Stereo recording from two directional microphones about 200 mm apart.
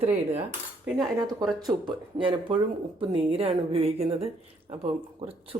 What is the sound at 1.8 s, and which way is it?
Speech, 25° right (ahead or behind).